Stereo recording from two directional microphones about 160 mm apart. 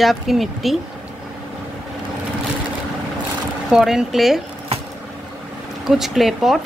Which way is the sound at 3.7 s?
5° right (ahead or behind).